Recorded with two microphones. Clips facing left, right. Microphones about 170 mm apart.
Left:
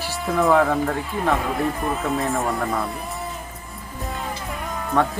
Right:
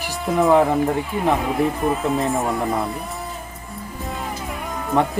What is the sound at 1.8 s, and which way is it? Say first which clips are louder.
Speech: right 3 dB; centre (ahead or behind).